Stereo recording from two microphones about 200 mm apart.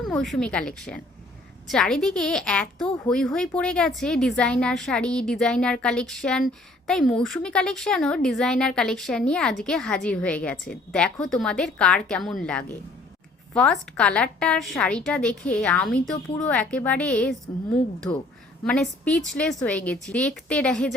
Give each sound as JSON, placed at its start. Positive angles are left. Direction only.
{"t": 0.0, "sound": "a woman's voice", "side_deg": 0}
{"t": 18.6, "sound": "a woman's voice", "side_deg": 5}